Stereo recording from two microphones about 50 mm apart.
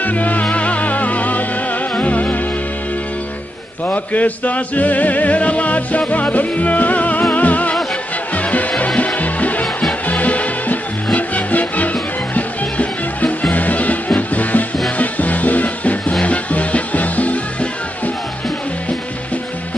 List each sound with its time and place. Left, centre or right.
0.0 s music: left
3.8 s music: left